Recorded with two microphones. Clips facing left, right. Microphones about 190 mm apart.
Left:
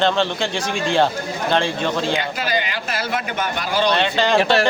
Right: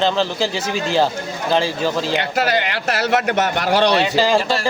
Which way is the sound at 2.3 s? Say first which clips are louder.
Right 4 dB; 70° right (ahead or behind).